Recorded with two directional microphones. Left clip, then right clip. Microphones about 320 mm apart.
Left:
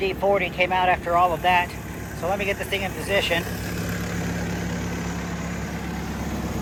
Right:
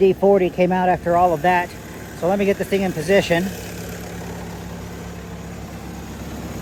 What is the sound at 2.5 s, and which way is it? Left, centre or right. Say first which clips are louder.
Speech: right 5 dB; right.